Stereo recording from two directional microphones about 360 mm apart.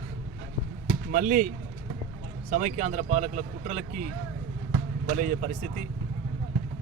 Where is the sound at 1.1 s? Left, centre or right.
Right.